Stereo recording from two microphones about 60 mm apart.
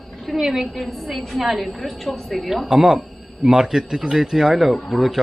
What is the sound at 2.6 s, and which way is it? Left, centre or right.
A woman's voice, centre.